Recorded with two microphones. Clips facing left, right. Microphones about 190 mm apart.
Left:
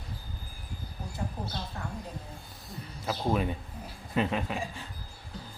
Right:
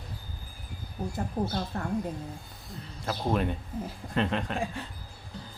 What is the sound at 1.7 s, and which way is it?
Speech, 55° right (ahead or behind).